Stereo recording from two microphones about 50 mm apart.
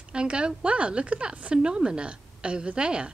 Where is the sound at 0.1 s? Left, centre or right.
Centre.